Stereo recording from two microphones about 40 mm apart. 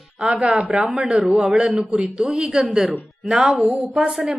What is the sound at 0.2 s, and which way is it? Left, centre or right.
Speech, right.